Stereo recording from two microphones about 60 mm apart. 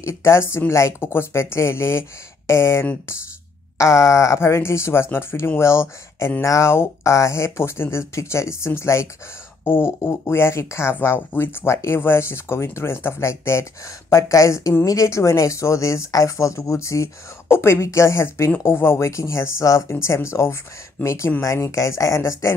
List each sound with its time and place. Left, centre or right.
0.0 s speech: left
9.7 s speech: left
11.0 s speech: left
14.1 s speech: left